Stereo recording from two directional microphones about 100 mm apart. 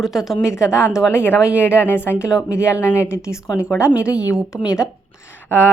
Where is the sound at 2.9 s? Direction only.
25° left (ahead or behind).